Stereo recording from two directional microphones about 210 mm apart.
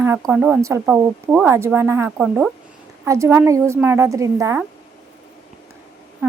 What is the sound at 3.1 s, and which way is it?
Speech, 15° right (ahead or behind).